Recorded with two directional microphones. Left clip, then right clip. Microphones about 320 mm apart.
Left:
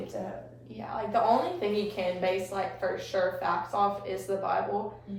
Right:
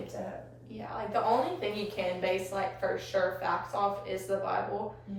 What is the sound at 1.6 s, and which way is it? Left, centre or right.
A woman's voice, centre.